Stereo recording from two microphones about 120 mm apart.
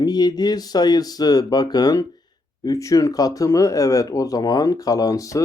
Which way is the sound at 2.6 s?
30° left (ahead or behind).